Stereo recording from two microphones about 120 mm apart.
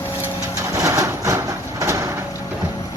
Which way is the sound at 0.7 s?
25° right (ahead or behind).